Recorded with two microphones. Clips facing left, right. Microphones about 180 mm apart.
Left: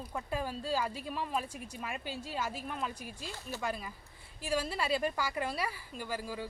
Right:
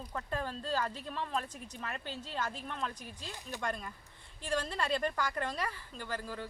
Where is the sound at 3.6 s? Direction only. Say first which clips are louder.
Even; 5° left (ahead or behind).